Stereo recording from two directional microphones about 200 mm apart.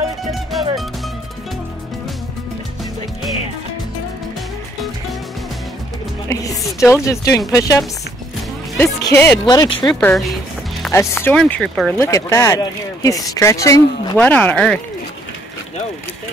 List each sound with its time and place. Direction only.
0.3 s music: centre (ahead or behind)
6.2 s music: 15° left (ahead or behind)
6.9 s speech: 15° left (ahead or behind)
9.9 s speech: centre (ahead or behind)
10.9 s speech: 15° left (ahead or behind)
12.0 s speech: 15° left (ahead or behind)